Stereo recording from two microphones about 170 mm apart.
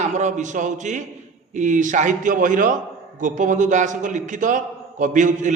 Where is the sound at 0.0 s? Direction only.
45° right (ahead or behind).